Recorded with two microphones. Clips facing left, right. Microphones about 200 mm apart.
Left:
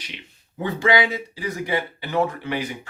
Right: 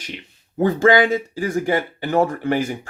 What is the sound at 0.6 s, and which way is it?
Speech, 45° right (ahead or behind).